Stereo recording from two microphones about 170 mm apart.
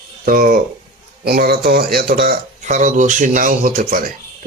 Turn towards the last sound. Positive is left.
turn(degrees=-55)  # may be behind; listen again after turning